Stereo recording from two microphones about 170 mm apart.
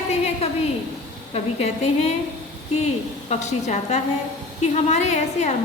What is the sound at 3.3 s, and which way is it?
A woman's voice, 45° left (ahead or behind).